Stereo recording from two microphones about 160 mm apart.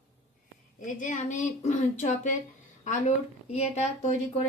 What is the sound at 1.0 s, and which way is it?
Speech, 50° left (ahead or behind).